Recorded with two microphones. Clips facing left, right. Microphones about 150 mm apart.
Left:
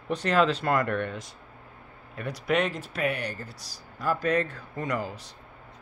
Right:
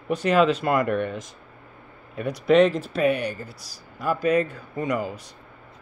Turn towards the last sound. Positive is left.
turn(degrees=-15)  # may be behind; listen again after turning